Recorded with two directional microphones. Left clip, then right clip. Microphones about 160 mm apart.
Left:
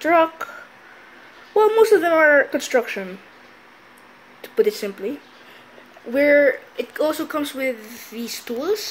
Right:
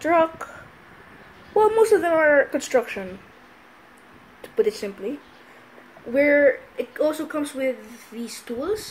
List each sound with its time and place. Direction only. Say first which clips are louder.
0.0 s speech: left 3 dB; 20° left (ahead or behind)
1.5 s speech: left 3 dB; 20° left (ahead or behind)
4.4 s speech: left 3 dB; 30° left (ahead or behind)
6.1 s speech: left 2 dB; 20° left (ahead or behind)